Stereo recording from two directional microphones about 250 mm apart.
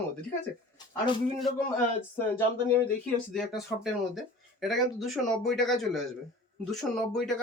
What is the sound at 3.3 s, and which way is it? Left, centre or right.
Speech, centre.